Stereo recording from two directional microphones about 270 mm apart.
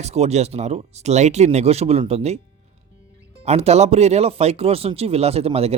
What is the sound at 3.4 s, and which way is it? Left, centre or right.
Speech, right.